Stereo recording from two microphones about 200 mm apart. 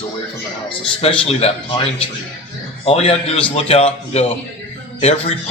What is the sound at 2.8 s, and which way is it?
A man's voice, 30° left (ahead or behind).